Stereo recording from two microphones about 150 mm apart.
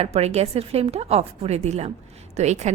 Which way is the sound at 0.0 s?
45° right (ahead or behind).